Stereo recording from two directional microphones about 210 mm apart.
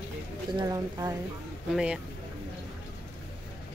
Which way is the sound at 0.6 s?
15° right (ahead or behind).